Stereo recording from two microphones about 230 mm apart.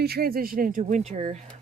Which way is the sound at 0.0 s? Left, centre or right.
Right.